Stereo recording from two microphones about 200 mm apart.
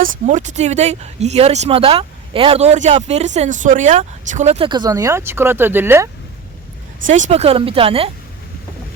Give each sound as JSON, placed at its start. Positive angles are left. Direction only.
{"t": 0.0, "sound": "speech", "side_deg": -35}
{"t": 7.1, "sound": "speech", "side_deg": -35}